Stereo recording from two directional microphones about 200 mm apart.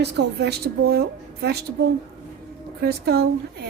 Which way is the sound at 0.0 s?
60° right (ahead or behind).